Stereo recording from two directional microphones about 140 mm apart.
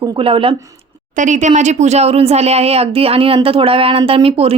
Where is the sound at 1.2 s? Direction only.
60° right (ahead or behind).